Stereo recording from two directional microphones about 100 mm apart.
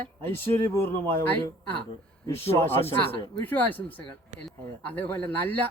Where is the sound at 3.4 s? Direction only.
15° left (ahead or behind).